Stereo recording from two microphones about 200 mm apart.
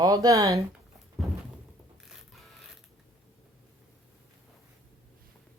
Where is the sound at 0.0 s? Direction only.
20° right (ahead or behind).